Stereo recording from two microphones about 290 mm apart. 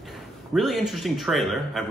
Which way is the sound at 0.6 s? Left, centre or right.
Centre.